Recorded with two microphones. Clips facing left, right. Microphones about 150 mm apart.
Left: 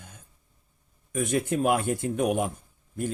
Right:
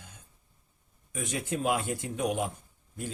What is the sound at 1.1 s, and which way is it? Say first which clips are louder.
Speech: left 7 dB; 55° left (ahead or behind).